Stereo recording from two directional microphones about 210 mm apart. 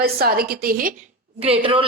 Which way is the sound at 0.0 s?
45° right (ahead or behind).